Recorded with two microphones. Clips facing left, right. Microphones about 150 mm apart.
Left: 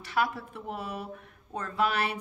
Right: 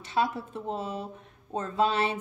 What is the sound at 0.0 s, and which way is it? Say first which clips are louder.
Speech: right 1 dB; 25° right (ahead or behind).